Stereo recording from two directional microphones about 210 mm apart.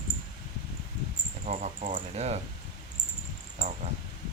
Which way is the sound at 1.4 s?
35° right (ahead or behind).